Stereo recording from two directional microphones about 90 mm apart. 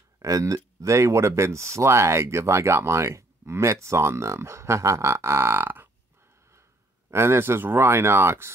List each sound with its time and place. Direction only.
0.2 s speech: 35° right (ahead or behind)
7.1 s speech: 30° right (ahead or behind)